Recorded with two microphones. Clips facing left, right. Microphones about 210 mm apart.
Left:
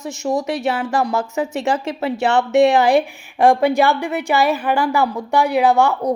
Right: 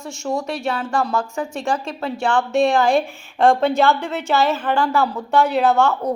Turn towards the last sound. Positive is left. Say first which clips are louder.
# left 2 dB
turn(degrees=15)  # may be behind; listen again after turning